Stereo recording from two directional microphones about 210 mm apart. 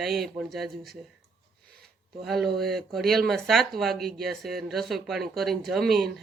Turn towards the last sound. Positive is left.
turn(degrees=0)  # may be behind; listen again after turning